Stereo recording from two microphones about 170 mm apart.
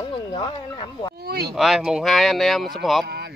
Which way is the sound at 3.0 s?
70° right (ahead or behind).